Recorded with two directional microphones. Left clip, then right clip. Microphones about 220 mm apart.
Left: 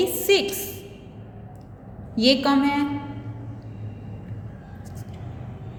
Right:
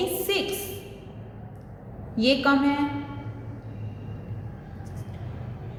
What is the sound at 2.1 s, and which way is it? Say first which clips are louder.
Speech: left 2 dB; 40° left (ahead or behind).